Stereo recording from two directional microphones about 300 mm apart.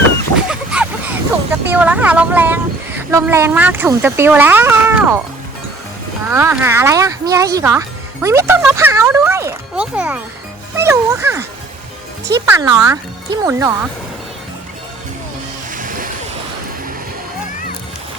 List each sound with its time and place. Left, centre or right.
0.3 s a sound: centre
1.7 s speech: centre
6.3 s speech: centre
15.7 s music: right